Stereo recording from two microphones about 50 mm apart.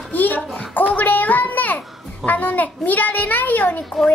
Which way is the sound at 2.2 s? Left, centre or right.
Left.